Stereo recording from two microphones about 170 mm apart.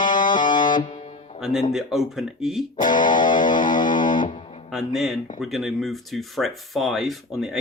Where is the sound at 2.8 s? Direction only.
50° left (ahead or behind).